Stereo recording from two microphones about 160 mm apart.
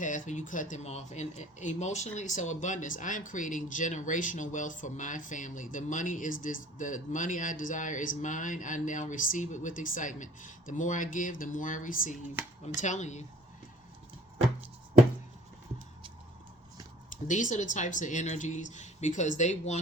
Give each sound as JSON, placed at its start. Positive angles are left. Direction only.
{"t": 0.0, "sound": "speech", "side_deg": 50}
{"t": 17.2, "sound": "speech", "side_deg": 50}